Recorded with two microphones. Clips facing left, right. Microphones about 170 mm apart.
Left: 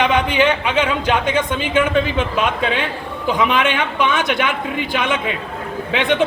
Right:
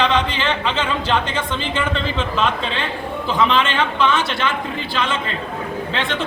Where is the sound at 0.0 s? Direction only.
15° left (ahead or behind).